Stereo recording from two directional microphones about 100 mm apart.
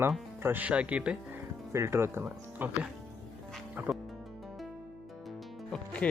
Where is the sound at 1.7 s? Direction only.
25° right (ahead or behind).